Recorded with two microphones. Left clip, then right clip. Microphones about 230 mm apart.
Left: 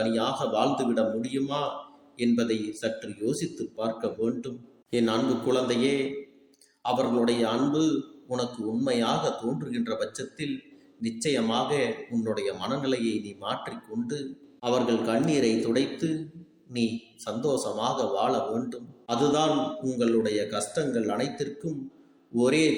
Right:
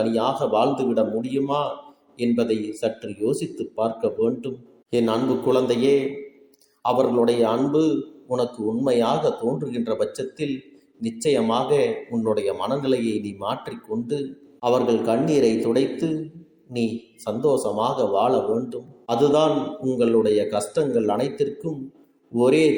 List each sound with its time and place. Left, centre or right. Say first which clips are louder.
0.0 s speech: right 5 dB; centre